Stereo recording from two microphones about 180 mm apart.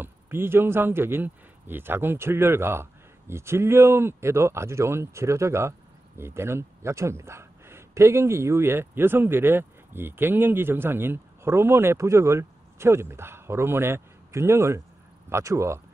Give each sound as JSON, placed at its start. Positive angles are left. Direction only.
{"t": 0.0, "sound": "a man's voice", "side_deg": -10}